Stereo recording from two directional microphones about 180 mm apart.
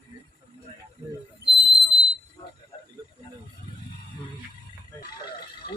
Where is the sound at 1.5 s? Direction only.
65° left (ahead or behind).